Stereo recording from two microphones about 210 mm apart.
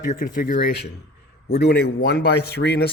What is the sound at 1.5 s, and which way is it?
Speech, 50° left (ahead or behind).